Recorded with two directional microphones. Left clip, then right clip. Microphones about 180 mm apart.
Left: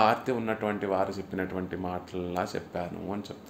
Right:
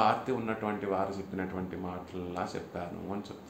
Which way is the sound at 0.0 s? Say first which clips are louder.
Left 3 dB; 40° left (ahead or behind).